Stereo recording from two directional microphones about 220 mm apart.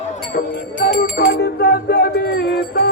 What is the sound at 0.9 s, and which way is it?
Music, 35° left (ahead or behind).